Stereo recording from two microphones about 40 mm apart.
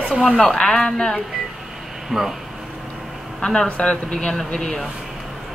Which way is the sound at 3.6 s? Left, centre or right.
Left.